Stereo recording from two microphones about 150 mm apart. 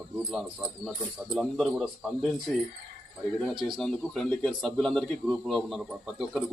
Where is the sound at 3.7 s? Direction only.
5° left (ahead or behind).